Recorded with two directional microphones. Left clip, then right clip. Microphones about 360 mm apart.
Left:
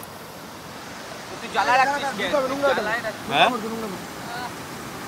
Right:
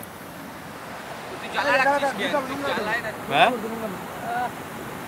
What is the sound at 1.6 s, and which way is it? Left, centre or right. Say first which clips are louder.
Speech: left 1 dB; left.